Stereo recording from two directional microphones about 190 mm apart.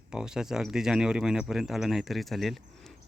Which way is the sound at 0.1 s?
5° right (ahead or behind).